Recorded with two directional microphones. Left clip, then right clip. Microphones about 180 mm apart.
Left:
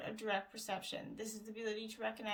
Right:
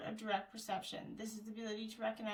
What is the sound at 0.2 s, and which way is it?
Speech, 45° left (ahead or behind).